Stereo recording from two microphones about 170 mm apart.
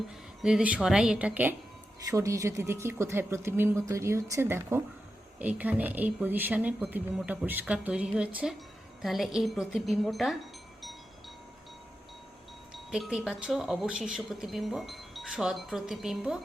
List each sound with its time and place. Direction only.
0.4 s speech: 5° right (ahead or behind)
12.7 s speech: centre (ahead or behind)